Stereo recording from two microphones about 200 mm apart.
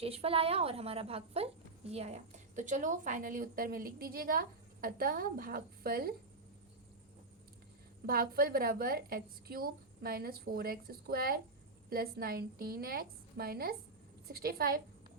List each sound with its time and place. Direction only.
0.0 s a woman's voice: 30° right (ahead or behind); by 6.1 s 50° right (ahead or behind)
8.0 s a woman's voice: 45° right (ahead or behind)